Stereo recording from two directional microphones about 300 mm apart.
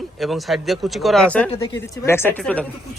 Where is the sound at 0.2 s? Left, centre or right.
Centre.